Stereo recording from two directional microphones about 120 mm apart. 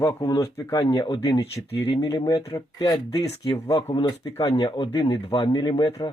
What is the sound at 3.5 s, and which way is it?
Speech, 35° left (ahead or behind).